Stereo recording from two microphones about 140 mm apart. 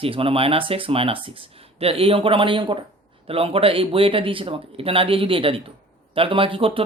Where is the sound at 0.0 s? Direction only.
40° right (ahead or behind).